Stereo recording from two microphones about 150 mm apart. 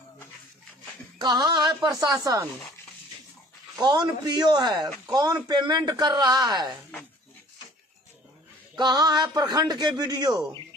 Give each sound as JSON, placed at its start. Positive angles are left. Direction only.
{"t": 1.1, "sound": "a man's voice", "side_deg": -30}
{"t": 3.8, "sound": "a man's voice", "side_deg": -30}
{"t": 8.7, "sound": "a man's voice", "side_deg": -25}